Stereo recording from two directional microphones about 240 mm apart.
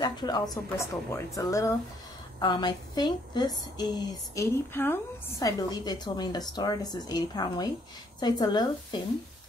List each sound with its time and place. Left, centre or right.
0.0 s a woman's voice: centre